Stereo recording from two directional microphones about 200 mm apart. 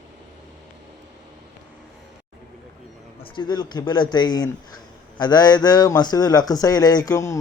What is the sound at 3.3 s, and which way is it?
A man's voice, 20° left (ahead or behind).